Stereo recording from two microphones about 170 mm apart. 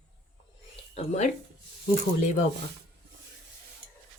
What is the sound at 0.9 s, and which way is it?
Speech, 40° left (ahead or behind).